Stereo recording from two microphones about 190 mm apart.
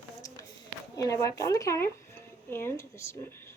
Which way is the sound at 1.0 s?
15° left (ahead or behind).